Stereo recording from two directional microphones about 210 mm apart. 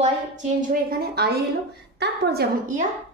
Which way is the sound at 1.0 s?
50° right (ahead or behind).